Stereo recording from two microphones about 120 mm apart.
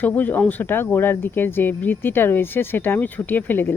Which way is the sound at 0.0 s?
15° left (ahead or behind).